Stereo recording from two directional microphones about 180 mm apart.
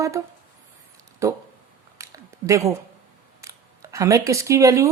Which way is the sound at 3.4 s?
15° right (ahead or behind).